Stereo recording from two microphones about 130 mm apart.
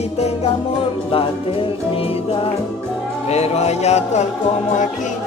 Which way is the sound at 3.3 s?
55° left (ahead or behind).